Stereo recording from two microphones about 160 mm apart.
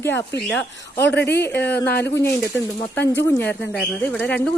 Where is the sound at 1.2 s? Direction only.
90° left.